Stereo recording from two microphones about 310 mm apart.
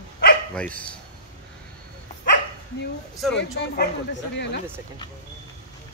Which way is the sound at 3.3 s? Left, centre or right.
Left.